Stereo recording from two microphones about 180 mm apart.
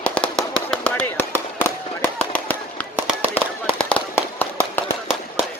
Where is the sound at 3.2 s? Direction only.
10° left (ahead or behind).